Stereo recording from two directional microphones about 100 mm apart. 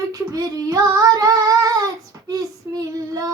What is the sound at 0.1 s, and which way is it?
Child singing, 35° right (ahead or behind).